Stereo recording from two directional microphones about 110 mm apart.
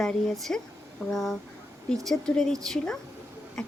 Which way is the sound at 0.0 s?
5° left (ahead or behind).